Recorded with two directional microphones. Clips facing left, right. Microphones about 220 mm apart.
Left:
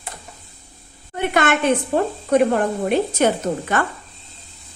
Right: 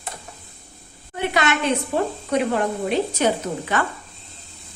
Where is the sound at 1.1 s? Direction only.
50° left (ahead or behind).